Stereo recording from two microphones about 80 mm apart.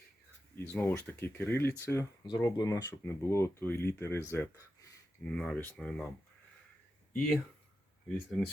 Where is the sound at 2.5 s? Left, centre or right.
Left.